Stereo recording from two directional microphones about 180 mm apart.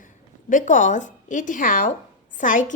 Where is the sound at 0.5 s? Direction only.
45° left (ahead or behind).